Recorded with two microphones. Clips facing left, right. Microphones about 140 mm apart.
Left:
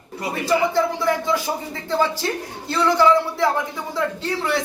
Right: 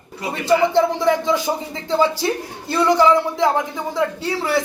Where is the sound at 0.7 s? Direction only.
20° right (ahead or behind).